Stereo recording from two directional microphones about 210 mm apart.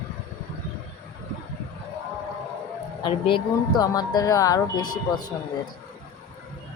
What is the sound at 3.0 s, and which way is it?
Speech, 25° left (ahead or behind).